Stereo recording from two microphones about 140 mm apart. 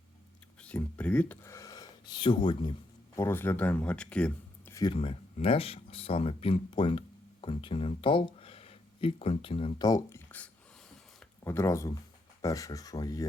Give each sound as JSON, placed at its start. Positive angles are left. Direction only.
{"t": 0.6, "sound": "speech", "side_deg": 10}
{"t": 1.5, "sound": "speech", "side_deg": 25}
{"t": 3.2, "sound": "speech", "side_deg": 15}
{"t": 4.7, "sound": "a sound", "side_deg": 30}
{"t": 4.9, "sound": "speech", "side_deg": 45}
{"t": 9.8, "sound": "speech", "side_deg": 25}